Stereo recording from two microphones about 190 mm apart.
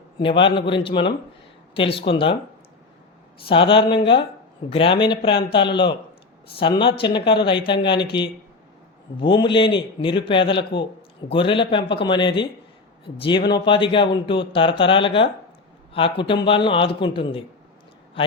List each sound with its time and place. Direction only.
0.2 s speech: 25° left (ahead or behind)
3.5 s speech: 25° left (ahead or behind)
9.2 s speech: 25° left (ahead or behind)
13.5 s a man's voice: 25° left (ahead or behind)